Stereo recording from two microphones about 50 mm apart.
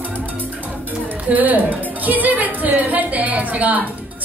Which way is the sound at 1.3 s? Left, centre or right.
Right.